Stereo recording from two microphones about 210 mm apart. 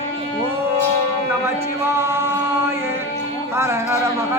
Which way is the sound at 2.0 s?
10° right (ahead or behind).